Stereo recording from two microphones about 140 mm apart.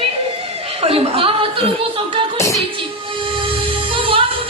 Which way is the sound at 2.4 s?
20° left (ahead or behind).